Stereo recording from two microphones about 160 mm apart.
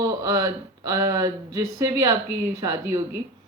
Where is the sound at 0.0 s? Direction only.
25° right (ahead or behind).